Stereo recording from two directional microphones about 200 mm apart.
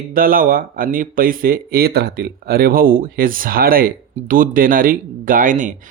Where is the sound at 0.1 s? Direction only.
45° right (ahead or behind).